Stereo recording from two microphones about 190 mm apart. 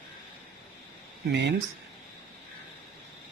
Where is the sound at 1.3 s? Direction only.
65° right (ahead or behind).